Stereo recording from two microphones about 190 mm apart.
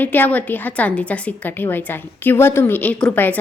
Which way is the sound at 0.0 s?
10° left (ahead or behind).